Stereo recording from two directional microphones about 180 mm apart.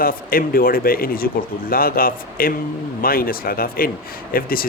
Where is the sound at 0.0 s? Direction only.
55° left (ahead or behind).